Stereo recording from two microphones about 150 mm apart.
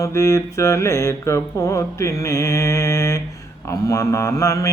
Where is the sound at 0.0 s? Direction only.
20° left (ahead or behind).